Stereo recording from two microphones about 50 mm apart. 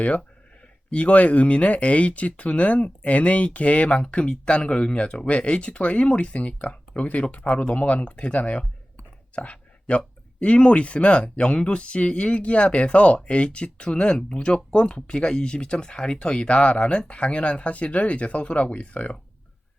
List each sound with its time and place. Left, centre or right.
0.9 s speech: left